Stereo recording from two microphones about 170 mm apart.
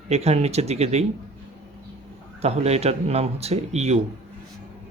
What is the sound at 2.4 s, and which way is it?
Speech, 40° right (ahead or behind).